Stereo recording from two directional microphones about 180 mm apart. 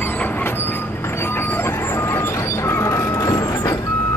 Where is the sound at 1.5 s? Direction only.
15° left (ahead or behind).